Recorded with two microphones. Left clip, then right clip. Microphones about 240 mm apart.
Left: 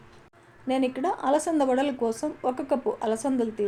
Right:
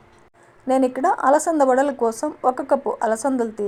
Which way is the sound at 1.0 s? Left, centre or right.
Right.